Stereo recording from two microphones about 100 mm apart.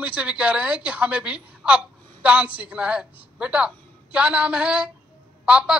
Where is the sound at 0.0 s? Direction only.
15° right (ahead or behind).